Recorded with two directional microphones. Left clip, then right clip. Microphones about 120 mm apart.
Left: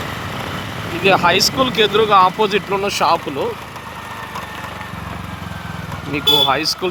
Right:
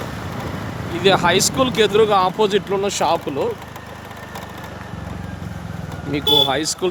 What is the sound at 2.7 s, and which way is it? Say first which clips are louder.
Speech: left 3 dB; 15° right (ahead or behind).